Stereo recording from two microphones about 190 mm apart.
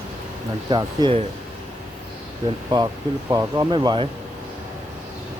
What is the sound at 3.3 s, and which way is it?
Speech, 20° right (ahead or behind).